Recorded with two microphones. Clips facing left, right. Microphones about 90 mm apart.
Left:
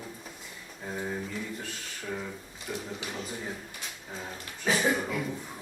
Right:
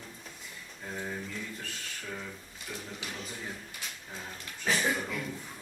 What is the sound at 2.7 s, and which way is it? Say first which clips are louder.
Speech: left 5 dB; 5° left (ahead or behind).